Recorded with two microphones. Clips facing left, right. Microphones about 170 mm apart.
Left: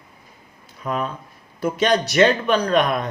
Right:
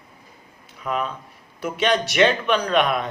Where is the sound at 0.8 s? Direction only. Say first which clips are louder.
Left 1 dB; 40° left (ahead or behind).